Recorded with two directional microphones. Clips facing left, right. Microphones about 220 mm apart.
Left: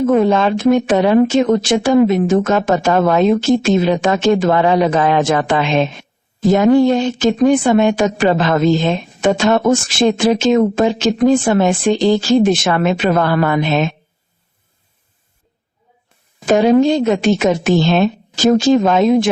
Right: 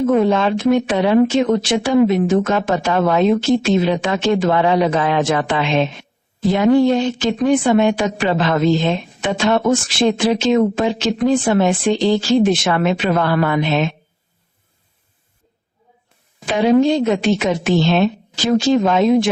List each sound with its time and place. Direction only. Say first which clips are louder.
0.0 s speech: left 2 dB; 45° left (ahead or behind)
16.5 s speech: left 3 dB; 45° left (ahead or behind)